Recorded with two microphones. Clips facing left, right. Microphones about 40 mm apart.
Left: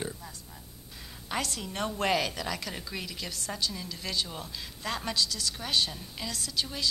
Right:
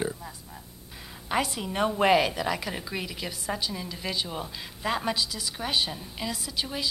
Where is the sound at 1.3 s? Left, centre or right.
Centre.